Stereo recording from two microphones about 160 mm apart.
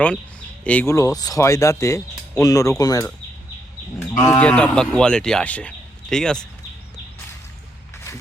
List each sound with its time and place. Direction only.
0.6 s speech: 10° left (ahead or behind)
0.9 s speech: 20° left (ahead or behind)
4.2 s speech: 15° left (ahead or behind)